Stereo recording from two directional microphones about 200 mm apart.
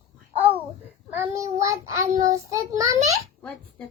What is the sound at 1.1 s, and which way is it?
Child singing, 15° right (ahead or behind).